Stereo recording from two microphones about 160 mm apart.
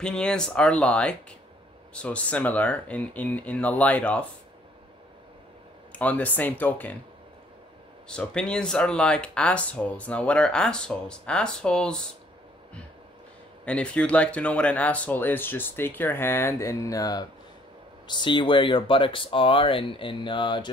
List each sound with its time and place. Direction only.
0.0 s speech: 5° left (ahead or behind)
5.9 s speech: 10° left (ahead or behind)
8.1 s speech: 5° left (ahead or behind)
13.7 s speech: 5° left (ahead or behind); by 20.6 s 30° left (ahead or behind)